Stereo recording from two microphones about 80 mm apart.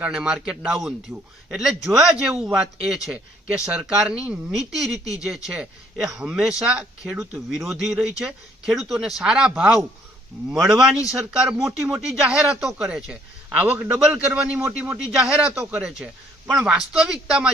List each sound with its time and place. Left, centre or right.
0.0 s speech: centre